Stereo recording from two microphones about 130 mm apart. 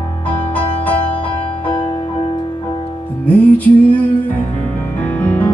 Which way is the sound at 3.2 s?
10° left (ahead or behind).